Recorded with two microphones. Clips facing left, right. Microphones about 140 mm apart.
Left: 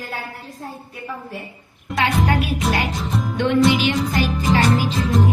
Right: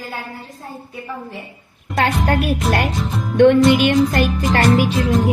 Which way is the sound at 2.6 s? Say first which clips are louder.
Right 3 dB; centre (ahead or behind).